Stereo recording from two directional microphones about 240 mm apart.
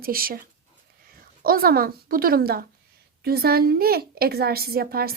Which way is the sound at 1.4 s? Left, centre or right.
Right.